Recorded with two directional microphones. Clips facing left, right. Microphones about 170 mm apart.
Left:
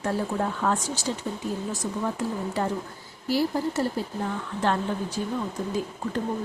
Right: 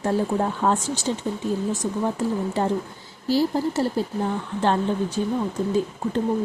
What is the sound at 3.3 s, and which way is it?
Speech, 30° right (ahead or behind).